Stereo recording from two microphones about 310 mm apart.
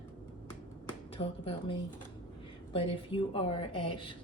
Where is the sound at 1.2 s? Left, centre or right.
Centre.